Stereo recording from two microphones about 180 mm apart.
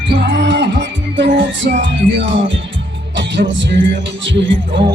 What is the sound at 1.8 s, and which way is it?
Speech, 90° right.